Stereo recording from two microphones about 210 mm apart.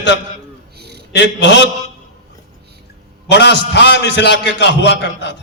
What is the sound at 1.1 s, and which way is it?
Speech, 55° left (ahead or behind).